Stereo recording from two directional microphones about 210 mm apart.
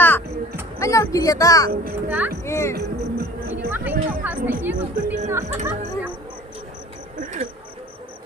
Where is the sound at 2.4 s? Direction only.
15° left (ahead or behind).